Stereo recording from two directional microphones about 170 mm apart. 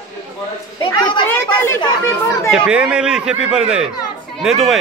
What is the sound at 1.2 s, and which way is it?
Chatter, 15° left (ahead or behind).